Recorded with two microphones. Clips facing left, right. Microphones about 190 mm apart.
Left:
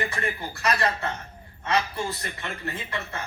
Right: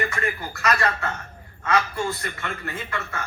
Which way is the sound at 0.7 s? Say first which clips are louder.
Right 2 dB; 20° left (ahead or behind).